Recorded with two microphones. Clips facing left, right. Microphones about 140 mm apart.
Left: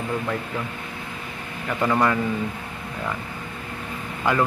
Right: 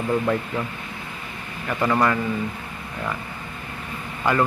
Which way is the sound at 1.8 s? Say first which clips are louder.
Even; centre (ahead or behind).